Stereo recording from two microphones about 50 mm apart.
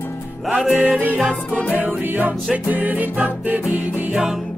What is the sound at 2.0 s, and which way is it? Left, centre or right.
Music, right.